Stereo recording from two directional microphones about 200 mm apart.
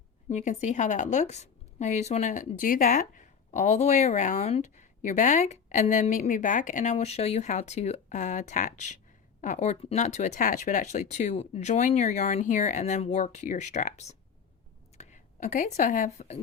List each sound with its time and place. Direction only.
0.3 s a woman's voice: 35° left (ahead or behind)